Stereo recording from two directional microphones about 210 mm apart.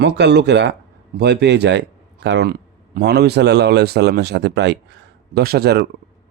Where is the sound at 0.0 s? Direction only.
55° right (ahead or behind).